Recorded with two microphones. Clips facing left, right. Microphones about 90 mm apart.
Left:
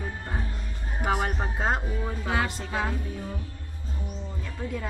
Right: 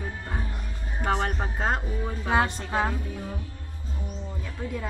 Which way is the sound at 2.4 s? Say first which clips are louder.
Right 3 dB; 35° right (ahead or behind).